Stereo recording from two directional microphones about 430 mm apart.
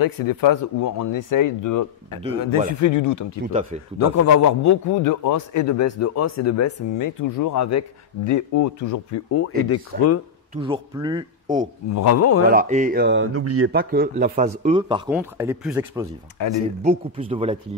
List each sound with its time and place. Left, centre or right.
0.0 s speech: left
2.1 s a man's voice: centre
2.7 s a man's voice: left
10.5 s a man's voice: centre
11.9 s a man's voice: left
12.4 s a man's voice: centre
16.4 s speech: left
16.8 s a man's voice: centre